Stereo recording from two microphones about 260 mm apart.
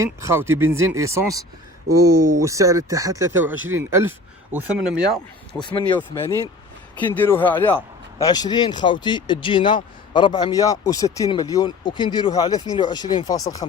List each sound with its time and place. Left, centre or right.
0.0 s speech: centre
5.5 s speech: centre